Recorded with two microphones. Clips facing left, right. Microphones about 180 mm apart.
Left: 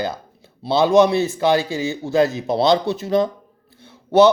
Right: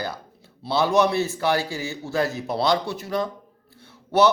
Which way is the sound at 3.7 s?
20° left (ahead or behind).